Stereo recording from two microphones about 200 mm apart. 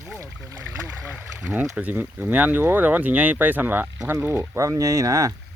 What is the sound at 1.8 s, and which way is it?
Speech, 10° right (ahead or behind).